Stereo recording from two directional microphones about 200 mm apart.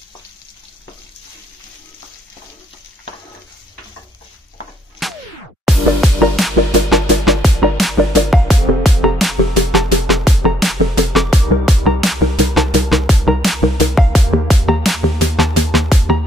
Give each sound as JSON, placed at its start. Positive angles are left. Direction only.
{"t": 5.0, "sound": "music", "side_deg": 0}